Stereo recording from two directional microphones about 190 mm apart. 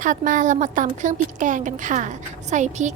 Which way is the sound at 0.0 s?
45° right (ahead or behind).